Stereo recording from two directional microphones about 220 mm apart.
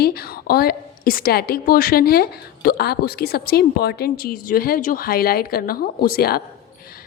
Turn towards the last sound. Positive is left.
turn(degrees=45)  # may be behind; listen again after turning